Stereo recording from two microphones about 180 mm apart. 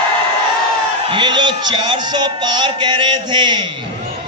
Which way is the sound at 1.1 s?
25° right (ahead or behind).